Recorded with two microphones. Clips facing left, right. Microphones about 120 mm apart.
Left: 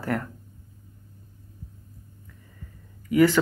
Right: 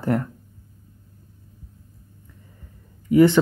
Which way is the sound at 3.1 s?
20° right (ahead or behind).